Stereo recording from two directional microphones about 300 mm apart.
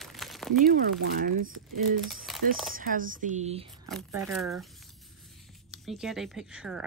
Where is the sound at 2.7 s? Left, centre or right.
Right.